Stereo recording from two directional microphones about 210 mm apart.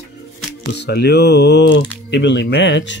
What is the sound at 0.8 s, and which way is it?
Speech, 50° left (ahead or behind).